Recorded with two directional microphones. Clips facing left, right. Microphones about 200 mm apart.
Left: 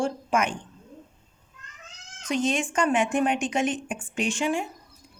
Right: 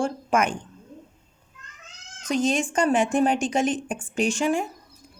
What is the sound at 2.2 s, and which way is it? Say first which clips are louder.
A woman's voice: right 2 dB; 40° right (ahead or behind).